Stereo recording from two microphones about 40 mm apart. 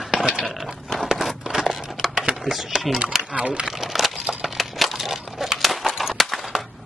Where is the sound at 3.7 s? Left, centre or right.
Centre.